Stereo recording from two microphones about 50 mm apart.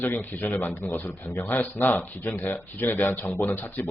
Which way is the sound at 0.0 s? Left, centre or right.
Left.